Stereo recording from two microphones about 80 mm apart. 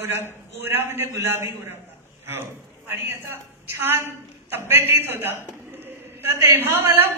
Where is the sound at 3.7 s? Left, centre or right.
Right.